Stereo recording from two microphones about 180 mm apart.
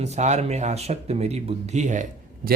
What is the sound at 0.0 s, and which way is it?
Mantra, 40° right (ahead or behind).